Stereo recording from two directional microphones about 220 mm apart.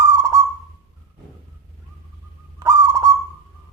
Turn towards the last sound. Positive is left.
turn(degrees=-15)  # may be behind; listen again after turning